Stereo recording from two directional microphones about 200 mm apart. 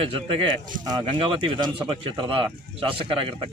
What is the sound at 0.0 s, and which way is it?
A man's voice, 30° right (ahead or behind).